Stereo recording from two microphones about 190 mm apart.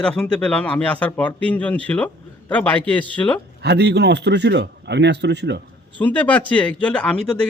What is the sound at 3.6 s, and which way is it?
Speech, 60° right (ahead or behind).